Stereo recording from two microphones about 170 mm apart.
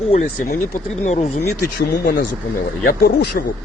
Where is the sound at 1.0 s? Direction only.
40° left (ahead or behind).